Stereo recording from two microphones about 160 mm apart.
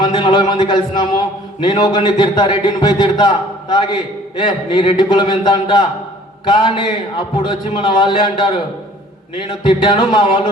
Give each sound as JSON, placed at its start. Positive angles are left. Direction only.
{"t": 0.0, "sound": "a man's voice", "side_deg": 30}